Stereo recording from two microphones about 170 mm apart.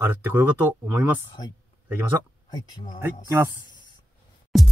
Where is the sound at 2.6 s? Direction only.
25° left (ahead or behind).